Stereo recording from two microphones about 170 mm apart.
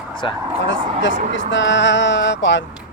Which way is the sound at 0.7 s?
90° left.